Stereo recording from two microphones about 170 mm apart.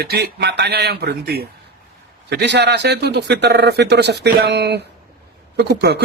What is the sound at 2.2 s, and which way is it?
A man's voice, 90° right.